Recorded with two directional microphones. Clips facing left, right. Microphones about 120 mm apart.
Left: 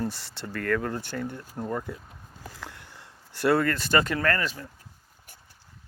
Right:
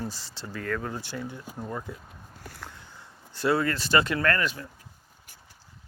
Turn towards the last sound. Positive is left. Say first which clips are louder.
# even
turn(degrees=35)  # may be behind; listen again after turning